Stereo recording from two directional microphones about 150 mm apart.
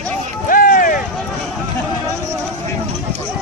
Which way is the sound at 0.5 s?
70° left (ahead or behind).